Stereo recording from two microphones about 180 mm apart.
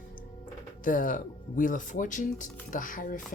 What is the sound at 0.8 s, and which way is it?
Speech, 50° left (ahead or behind).